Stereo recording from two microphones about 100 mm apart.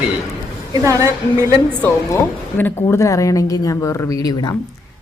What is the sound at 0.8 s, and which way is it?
Speech, 30° right (ahead or behind).